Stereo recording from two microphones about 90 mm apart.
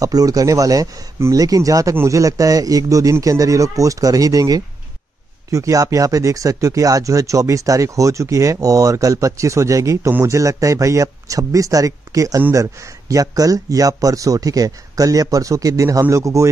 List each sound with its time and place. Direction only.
0.0 s speech: 40° right (ahead or behind)